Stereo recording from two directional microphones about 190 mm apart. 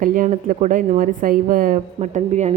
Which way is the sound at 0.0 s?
45° right (ahead or behind).